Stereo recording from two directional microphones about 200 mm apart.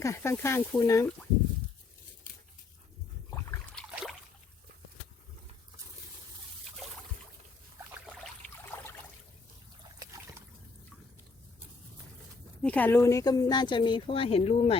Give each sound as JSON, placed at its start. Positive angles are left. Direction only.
{"t": 0.0, "sound": "speech", "side_deg": 15}
{"t": 3.8, "sound": "rowboat", "side_deg": 5}
{"t": 8.7, "sound": "a sound", "side_deg": 10}
{"t": 10.0, "sound": "trickle", "side_deg": -15}
{"t": 12.6, "sound": "speech", "side_deg": 10}